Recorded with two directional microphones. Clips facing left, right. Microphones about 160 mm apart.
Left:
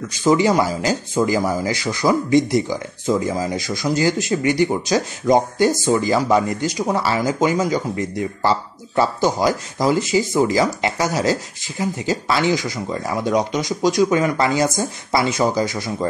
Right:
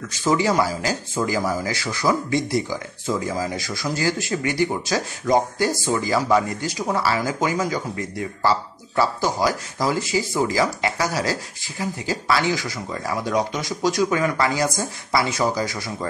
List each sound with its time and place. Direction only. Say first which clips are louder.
0.2 s speech: left 4 dB; 20° left (ahead or behind)